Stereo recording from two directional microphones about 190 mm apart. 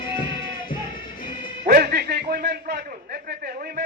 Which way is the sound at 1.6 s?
50° right (ahead or behind).